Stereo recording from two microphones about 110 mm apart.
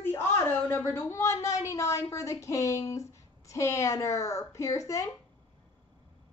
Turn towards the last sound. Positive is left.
turn(degrees=30)  # may be behind; listen again after turning